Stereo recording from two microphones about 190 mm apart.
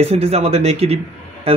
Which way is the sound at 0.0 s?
30° right (ahead or behind).